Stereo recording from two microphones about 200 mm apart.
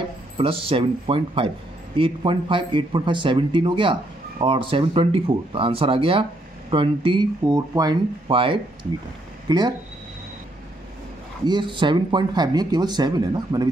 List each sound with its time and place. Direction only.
0.4 s a man's voice: 25° right (ahead or behind)
11.4 s a man's voice: 20° right (ahead or behind)